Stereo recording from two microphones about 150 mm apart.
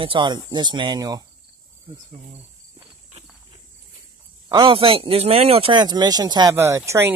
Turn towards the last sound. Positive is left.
turn(degrees=-20)  # may be behind; listen again after turning